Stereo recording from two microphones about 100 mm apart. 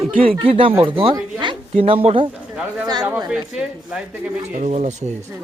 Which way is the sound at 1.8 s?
80° right.